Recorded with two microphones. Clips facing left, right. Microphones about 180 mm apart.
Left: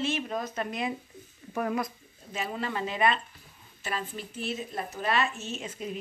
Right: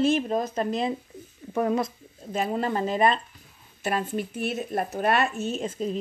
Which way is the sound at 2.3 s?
45° right (ahead or behind).